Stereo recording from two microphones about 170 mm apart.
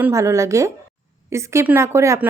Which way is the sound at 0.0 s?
15° right (ahead or behind).